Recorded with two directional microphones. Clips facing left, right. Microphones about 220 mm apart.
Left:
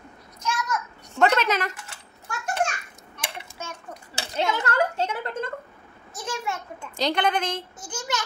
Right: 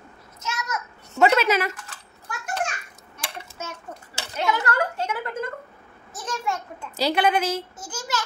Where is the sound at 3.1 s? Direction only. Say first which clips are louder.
Even; 5° right (ahead or behind).